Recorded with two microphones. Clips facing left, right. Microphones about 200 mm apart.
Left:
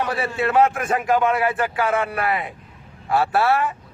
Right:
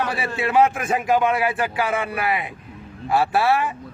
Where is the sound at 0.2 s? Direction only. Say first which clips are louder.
Even; 10° right (ahead or behind).